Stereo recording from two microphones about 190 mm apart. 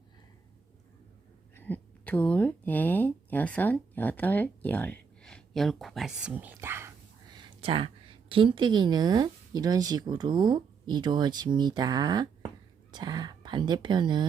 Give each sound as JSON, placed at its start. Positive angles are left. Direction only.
{"t": 1.5, "sound": "speech", "side_deg": 10}